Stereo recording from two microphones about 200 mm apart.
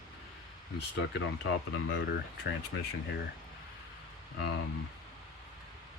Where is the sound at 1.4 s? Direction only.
65° left (ahead or behind).